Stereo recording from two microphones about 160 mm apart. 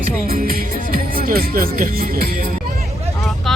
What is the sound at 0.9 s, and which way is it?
Speech, 65° right (ahead or behind).